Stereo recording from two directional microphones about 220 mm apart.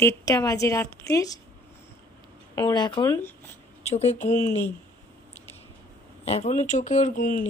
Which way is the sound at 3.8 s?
30° left (ahead or behind).